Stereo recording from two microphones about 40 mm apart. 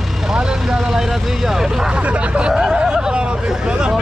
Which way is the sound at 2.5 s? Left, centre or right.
Centre.